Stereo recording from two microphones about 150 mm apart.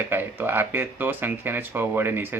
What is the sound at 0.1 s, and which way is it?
Speech, 15° right (ahead or behind).